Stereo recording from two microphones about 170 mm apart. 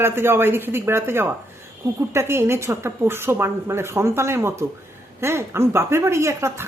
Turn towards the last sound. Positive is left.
turn(degrees=-15)  # may be behind; listen again after turning